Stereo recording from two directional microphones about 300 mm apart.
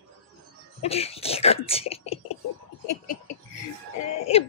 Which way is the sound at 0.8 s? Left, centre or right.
Centre.